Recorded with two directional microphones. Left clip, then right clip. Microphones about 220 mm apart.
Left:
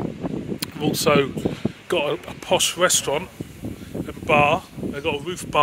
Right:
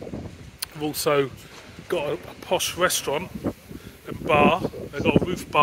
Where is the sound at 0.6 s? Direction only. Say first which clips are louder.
Left 3 dB; 10° left (ahead or behind).